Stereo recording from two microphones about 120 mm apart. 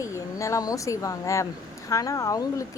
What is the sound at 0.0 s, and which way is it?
A woman's voice, 25° left (ahead or behind).